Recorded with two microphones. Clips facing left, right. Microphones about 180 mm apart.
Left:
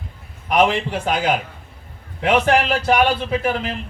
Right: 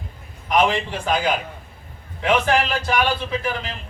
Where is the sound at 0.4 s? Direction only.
60° left (ahead or behind).